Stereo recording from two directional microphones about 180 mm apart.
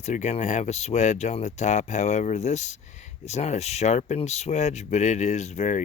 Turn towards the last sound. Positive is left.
turn(degrees=40)  # may be behind; listen again after turning